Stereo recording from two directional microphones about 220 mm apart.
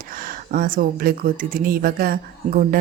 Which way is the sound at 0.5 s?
40° right (ahead or behind).